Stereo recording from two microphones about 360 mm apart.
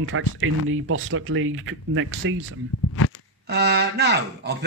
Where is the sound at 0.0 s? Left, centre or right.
Right.